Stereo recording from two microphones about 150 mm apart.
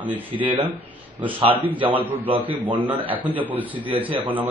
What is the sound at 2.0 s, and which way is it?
Speech, 10° right (ahead or behind).